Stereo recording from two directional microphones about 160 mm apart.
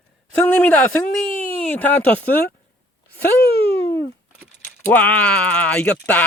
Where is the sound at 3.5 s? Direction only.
90° left.